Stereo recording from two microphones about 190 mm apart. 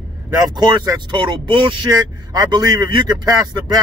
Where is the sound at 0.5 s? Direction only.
20° right (ahead or behind).